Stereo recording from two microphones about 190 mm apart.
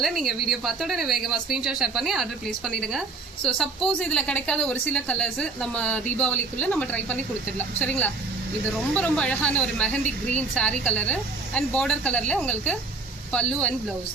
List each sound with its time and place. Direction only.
0.0 s a woman's voice: centre (ahead or behind)
10.0 s speech: 40° right (ahead or behind)
10.5 s a woman's voice: 5° left (ahead or behind)